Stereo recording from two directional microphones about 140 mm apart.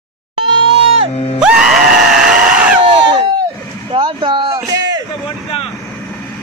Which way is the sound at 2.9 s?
35° right (ahead or behind).